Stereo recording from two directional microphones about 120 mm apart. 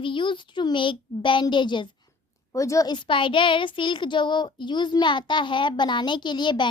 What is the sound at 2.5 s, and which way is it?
A woman's voice, 25° left (ahead or behind).